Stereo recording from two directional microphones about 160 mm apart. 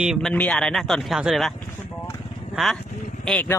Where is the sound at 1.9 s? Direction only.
15° left (ahead or behind).